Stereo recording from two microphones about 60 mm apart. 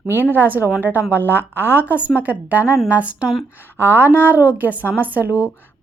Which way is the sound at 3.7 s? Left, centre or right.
Right.